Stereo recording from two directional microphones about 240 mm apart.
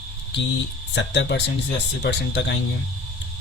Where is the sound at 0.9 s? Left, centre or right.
Left.